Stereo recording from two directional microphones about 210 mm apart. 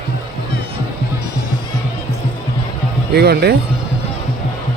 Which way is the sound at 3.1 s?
50° right (ahead or behind).